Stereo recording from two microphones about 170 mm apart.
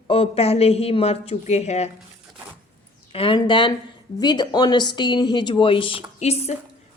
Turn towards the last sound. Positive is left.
turn(degrees=40)  # may be behind; listen again after turning